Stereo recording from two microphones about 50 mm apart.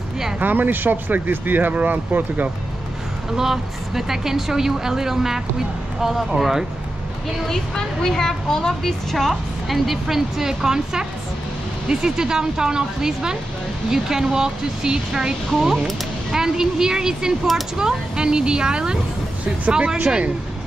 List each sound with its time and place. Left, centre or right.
0.4 s speech: right
3.3 s speech: centre
7.4 s a woman's voice: centre